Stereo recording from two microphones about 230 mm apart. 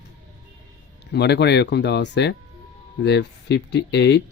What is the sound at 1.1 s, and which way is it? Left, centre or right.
Speech, left.